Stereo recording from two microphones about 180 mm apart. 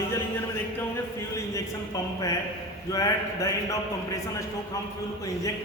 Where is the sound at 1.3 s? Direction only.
20° left (ahead or behind).